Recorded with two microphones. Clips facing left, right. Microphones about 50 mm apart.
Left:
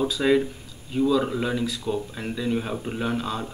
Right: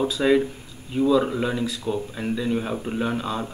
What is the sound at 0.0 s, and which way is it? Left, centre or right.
A man's voice, centre.